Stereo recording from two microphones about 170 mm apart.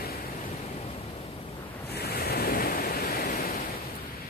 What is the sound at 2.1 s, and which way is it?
Waves, 65° left (ahead or behind).